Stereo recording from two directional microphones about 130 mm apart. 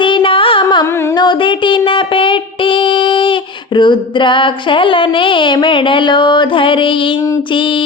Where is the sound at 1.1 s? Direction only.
35° left (ahead or behind).